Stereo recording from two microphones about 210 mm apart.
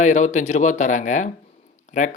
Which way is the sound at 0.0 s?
35° left (ahead or behind).